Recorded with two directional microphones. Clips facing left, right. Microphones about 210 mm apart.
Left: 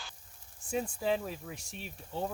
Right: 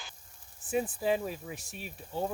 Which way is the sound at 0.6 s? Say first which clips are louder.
Right 3 dB; 5° right (ahead or behind).